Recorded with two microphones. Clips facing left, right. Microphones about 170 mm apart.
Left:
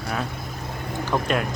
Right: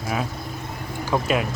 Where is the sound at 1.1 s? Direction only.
5° right (ahead or behind).